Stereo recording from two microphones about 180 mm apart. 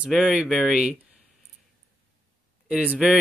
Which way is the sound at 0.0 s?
5° right (ahead or behind).